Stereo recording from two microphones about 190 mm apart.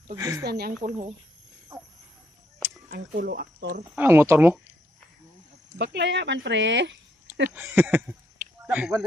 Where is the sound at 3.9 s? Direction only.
10° right (ahead or behind).